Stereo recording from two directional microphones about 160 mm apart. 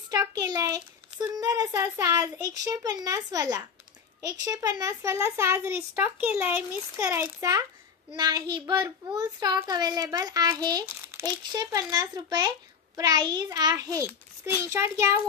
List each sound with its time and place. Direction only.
0.1 s a child's voice: 20° right (ahead or behind)